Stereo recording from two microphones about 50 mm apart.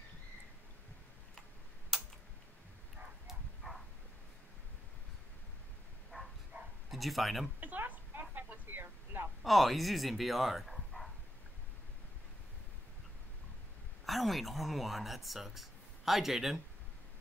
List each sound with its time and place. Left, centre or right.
3.3 s bow-wow: centre
6.1 s a sound: left
6.9 s speech: centre
7.6 s a sound: right
9.4 s speech: centre
14.0 s speech: centre